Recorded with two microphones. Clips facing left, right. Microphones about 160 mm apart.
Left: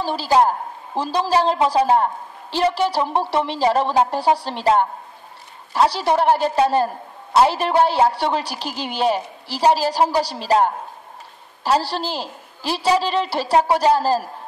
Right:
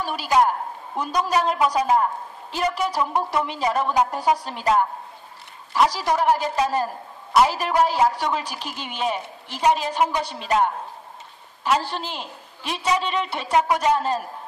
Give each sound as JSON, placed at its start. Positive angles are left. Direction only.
{"t": 0.0, "sound": "a woman's voice", "side_deg": 30}